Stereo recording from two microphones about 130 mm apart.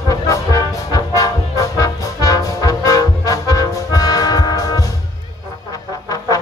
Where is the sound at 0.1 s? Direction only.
25° left (ahead or behind).